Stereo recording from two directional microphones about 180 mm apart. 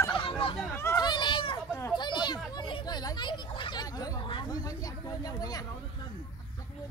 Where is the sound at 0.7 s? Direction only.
15° left (ahead or behind).